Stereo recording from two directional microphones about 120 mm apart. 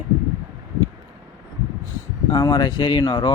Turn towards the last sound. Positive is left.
turn(degrees=40)  # may be behind; listen again after turning